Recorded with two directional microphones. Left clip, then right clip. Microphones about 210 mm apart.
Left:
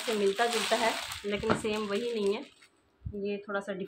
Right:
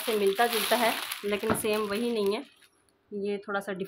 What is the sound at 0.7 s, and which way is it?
Speech, 50° right (ahead or behind).